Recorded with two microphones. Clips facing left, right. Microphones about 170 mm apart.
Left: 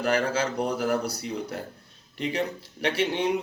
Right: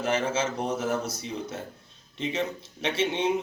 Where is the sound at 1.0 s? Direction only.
65° left (ahead or behind).